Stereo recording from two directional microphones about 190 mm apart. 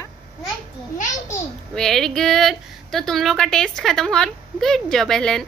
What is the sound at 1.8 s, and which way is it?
A woman's voice, centre (ahead or behind).